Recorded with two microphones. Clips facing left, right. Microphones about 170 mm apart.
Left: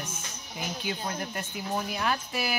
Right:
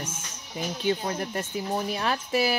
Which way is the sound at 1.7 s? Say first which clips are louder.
Right 1 dB; 30° right (ahead or behind).